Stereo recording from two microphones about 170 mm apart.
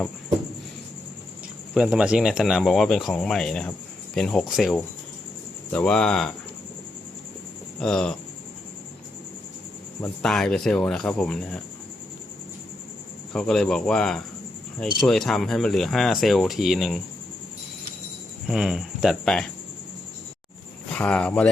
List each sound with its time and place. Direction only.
1.7 s speech: 5° right (ahead or behind)
7.8 s speech: 5° left (ahead or behind)
10.2 s speech: 5° left (ahead or behind)
13.3 s speech: 5° left (ahead or behind)
18.4 s speech: 5° right (ahead or behind)
20.9 s speech: 5° left (ahead or behind)